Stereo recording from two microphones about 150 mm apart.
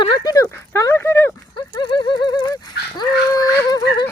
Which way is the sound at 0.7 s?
15° left (ahead or behind).